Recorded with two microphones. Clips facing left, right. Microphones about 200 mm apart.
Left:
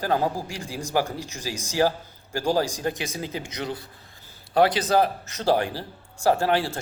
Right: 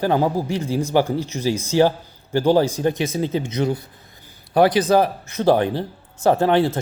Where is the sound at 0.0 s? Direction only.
20° right (ahead or behind).